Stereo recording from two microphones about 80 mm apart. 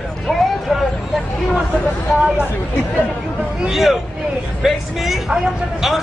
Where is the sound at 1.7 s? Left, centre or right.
Left.